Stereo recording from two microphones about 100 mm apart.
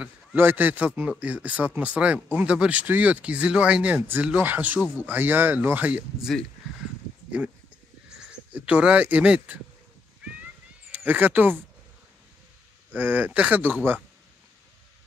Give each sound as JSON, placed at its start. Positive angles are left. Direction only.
{"t": 0.4, "sound": "speech", "side_deg": -20}
{"t": 8.3, "sound": "speech", "side_deg": -15}
{"t": 10.9, "sound": "speech", "side_deg": -15}
{"t": 12.9, "sound": "speech", "side_deg": -15}